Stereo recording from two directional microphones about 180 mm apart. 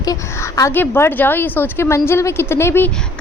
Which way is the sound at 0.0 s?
20° left (ahead or behind).